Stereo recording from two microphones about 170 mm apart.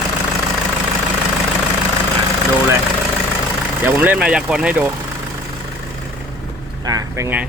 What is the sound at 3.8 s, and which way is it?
Speech, 10° right (ahead or behind).